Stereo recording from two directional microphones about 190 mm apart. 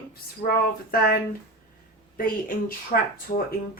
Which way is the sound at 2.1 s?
50° left (ahead or behind).